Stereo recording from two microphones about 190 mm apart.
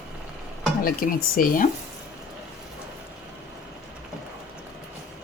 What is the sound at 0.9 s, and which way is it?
Speech, 50° left (ahead or behind).